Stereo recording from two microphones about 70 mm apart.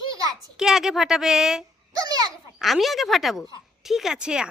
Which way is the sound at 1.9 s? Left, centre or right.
Right.